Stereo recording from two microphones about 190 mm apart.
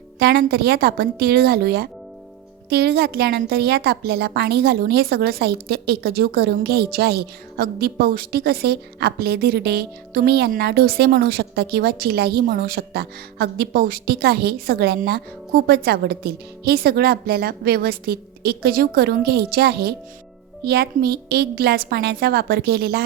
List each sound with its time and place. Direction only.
0.2 s a woman's voice: 55° right (ahead or behind)